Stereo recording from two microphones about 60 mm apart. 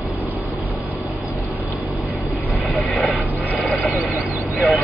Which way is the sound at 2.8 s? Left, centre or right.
Centre.